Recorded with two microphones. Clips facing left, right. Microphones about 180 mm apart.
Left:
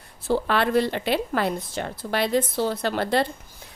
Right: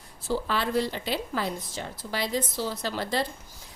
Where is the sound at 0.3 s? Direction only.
65° left (ahead or behind).